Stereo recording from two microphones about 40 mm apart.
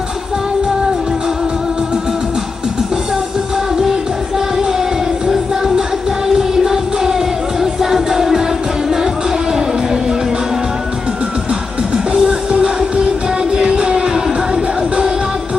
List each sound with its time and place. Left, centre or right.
4.4 s music: centre
9.5 s music: centre
12.1 s music: centre
12.5 s music: right